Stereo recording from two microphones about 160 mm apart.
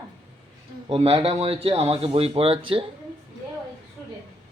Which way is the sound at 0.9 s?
35° right (ahead or behind).